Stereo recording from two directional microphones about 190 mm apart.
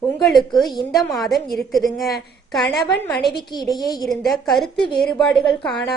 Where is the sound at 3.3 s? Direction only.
20° left (ahead or behind).